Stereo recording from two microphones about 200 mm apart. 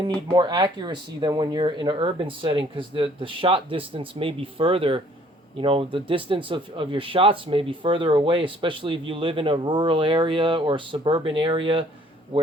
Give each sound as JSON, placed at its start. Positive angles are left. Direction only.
{"t": 0.3, "sound": "speech", "side_deg": -20}